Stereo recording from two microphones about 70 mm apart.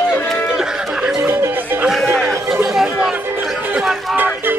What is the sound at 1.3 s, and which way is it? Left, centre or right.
Music, right.